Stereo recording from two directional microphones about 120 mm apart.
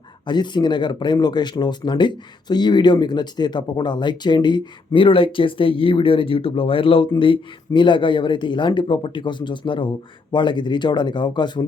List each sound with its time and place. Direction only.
0.3 s speech: 40° left (ahead or behind)